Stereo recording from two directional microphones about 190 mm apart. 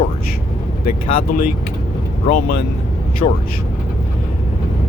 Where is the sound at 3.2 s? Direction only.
35° left (ahead or behind).